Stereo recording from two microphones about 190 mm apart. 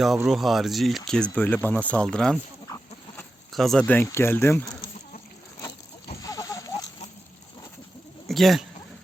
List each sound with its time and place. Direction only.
0.0 s speech: centre (ahead or behind)
2.6 s chicken: 15° left (ahead or behind)
3.5 s speech: centre (ahead or behind)
6.2 s a sound: 20° left (ahead or behind)
8.3 s speech: centre (ahead or behind)